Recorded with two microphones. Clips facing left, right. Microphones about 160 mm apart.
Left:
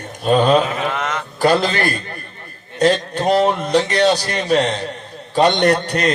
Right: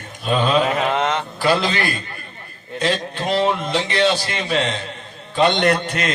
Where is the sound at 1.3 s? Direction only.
45° left (ahead or behind).